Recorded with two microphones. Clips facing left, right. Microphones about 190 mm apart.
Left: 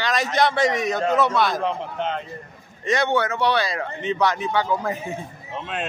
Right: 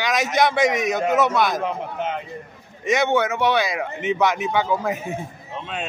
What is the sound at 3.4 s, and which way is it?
A man's voice, 15° right (ahead or behind).